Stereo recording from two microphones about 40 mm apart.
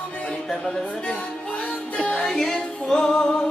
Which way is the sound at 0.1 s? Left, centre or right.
Left.